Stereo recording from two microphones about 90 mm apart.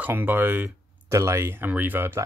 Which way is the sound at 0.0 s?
20° right (ahead or behind).